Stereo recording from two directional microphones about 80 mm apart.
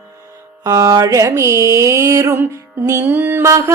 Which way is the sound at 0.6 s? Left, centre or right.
Right.